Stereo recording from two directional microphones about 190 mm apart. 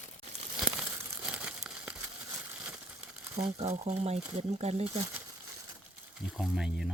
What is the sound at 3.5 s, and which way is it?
Speech, 35° right (ahead or behind).